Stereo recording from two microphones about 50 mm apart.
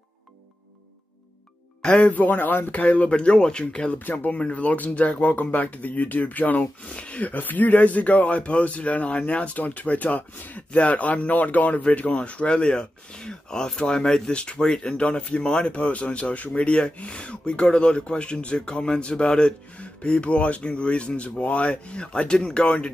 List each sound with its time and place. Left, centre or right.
1.8 s speech: centre
2.0 s speech: left
4.0 s speech: left
4.3 s speech: left